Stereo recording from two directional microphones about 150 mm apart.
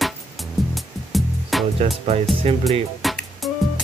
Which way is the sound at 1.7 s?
45° right (ahead or behind).